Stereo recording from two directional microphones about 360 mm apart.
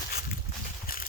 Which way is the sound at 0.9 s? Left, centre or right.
Left.